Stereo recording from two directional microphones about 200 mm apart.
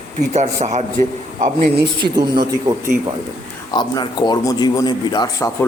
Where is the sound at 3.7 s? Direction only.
20° left (ahead or behind).